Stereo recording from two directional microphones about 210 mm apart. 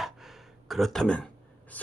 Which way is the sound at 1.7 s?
10° left (ahead or behind).